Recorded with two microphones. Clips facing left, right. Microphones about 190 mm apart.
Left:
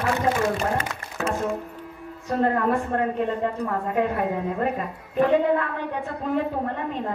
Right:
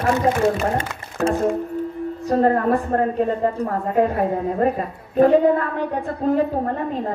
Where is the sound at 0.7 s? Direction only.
35° right (ahead or behind).